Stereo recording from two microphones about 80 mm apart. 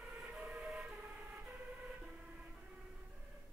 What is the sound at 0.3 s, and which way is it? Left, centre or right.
Emergency vehicle, centre.